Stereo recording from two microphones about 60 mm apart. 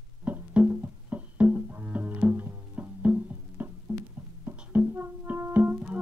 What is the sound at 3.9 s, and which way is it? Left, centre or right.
Music, right.